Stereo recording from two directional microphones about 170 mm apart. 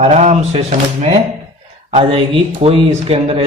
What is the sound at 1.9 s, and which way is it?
A man's voice, 35° right (ahead or behind).